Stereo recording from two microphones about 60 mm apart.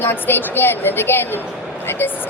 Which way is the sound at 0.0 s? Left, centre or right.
Left.